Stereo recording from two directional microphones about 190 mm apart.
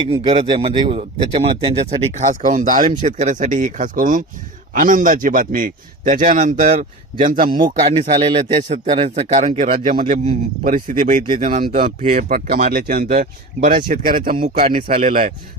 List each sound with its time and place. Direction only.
0.0 s a man's voice: 25° right (ahead or behind); by 7.6 s 45° right (ahead or behind)
7.6 s a man's voice: 35° right (ahead or behind)
11.9 s a man's voice: 50° right (ahead or behind)